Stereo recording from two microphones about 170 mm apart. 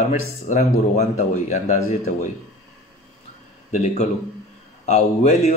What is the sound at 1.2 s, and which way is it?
A man's voice, 45° left (ahead or behind).